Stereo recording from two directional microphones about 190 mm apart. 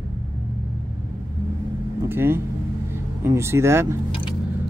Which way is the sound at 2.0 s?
10° right (ahead or behind).